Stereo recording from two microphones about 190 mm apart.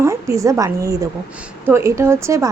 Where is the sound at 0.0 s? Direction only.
15° right (ahead or behind).